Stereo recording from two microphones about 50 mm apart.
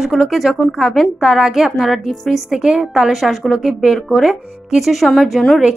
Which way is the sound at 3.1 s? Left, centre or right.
Centre.